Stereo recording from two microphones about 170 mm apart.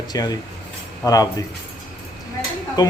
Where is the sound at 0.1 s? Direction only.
25° left (ahead or behind).